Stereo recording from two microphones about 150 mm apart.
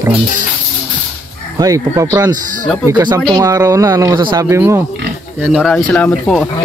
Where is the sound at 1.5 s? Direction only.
20° right (ahead or behind).